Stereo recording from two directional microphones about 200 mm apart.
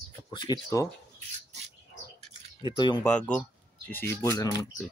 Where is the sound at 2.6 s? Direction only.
20° left (ahead or behind).